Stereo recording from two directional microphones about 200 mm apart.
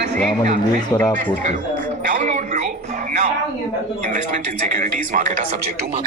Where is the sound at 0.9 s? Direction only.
10° left (ahead or behind).